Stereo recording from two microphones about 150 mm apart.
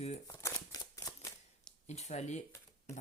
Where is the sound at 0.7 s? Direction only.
25° left (ahead or behind).